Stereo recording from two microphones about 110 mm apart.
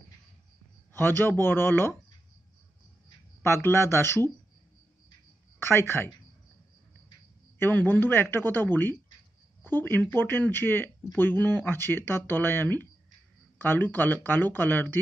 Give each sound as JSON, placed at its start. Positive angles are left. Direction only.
{"t": 0.9, "sound": "speech", "side_deg": 20}
{"t": 3.4, "sound": "speech", "side_deg": 25}
{"t": 5.6, "sound": "speech", "side_deg": 20}
{"t": 7.5, "sound": "speech", "side_deg": 20}